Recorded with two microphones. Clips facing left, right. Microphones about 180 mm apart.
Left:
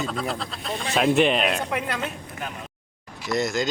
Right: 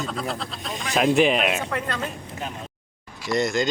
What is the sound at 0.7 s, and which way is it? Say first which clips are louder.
Speech: left 4 dB; 30° left (ahead or behind).